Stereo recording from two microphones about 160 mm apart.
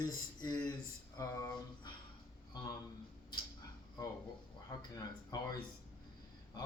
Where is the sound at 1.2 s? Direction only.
20° left (ahead or behind).